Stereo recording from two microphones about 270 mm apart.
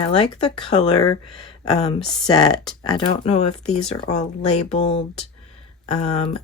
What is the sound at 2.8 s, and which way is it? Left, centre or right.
Speech, centre.